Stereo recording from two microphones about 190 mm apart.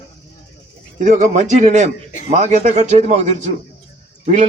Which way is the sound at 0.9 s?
40° right (ahead or behind).